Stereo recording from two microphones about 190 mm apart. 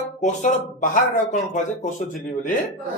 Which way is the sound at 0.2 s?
40° left (ahead or behind).